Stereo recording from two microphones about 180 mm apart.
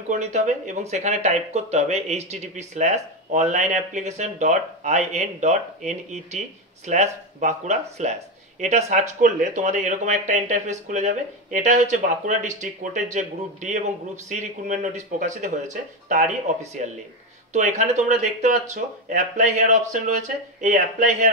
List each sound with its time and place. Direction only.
0.1 s speech: 40° right (ahead or behind)